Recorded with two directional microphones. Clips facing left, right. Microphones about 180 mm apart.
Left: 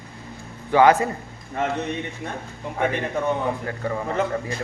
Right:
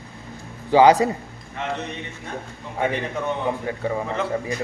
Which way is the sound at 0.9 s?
15° right (ahead or behind).